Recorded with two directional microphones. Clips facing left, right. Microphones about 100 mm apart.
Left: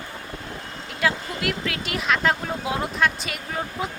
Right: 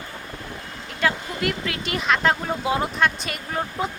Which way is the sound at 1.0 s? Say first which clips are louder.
Right 1 dB; centre (ahead or behind).